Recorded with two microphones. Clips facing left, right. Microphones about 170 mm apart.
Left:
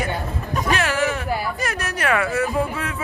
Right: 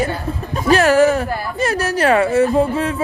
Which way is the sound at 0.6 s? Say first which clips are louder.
Right 11 dB; 40° right (ahead or behind).